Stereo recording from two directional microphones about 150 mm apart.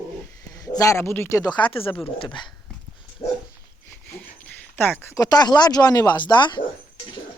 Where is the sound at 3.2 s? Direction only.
35° left (ahead or behind).